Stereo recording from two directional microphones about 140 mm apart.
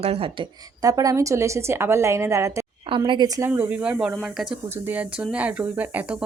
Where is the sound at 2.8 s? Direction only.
35° right (ahead or behind).